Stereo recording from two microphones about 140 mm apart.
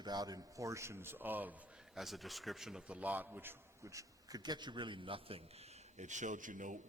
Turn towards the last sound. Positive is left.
turn(degrees=-65)  # may be behind; listen again after turning